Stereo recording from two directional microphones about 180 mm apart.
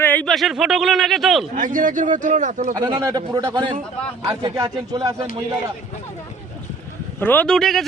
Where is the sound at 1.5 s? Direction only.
45° right (ahead or behind).